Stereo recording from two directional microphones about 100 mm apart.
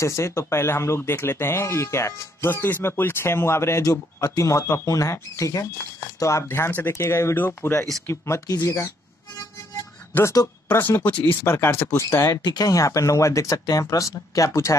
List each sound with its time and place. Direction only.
0.0 s speech: 30° left (ahead or behind)
10.4 s speech: 35° left (ahead or behind)
10.7 s speech: 20° left (ahead or behind)
12.4 s speech: 45° left (ahead or behind)